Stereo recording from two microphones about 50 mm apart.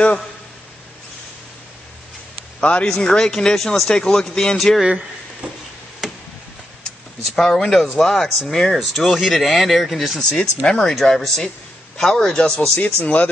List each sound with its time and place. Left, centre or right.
2.6 s speech: left
3.1 s speech: centre
3.9 s speech: centre
4.6 s speech: centre
4.8 s speech: right
7.3 s speech: centre
10.3 s speech: centre
12.7 s speech: left